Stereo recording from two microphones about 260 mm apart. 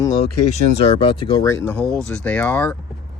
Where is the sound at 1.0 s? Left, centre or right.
Centre.